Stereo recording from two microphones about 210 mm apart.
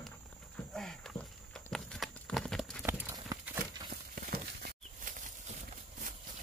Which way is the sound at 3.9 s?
45° right (ahead or behind).